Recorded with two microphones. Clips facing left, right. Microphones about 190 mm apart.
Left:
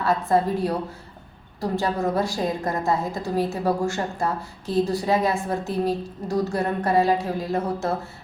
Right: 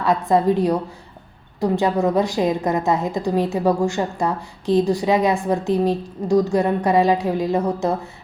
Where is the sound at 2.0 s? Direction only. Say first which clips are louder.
Right 5 dB; 15° right (ahead or behind).